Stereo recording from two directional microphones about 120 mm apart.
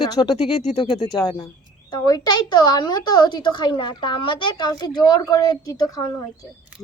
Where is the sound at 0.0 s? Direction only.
35° left (ahead or behind).